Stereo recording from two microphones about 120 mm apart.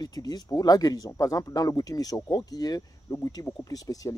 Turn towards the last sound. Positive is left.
turn(degrees=30)  # may be behind; listen again after turning